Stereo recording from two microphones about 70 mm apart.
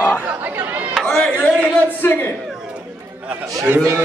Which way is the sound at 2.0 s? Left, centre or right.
Left.